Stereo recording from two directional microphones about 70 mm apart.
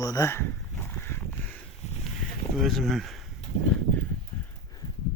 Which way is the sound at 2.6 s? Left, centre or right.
Centre.